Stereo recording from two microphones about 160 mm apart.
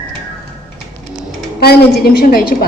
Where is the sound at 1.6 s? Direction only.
75° left (ahead or behind).